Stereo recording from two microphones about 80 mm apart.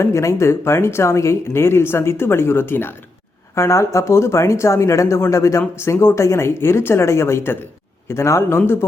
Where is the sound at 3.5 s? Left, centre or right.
Left.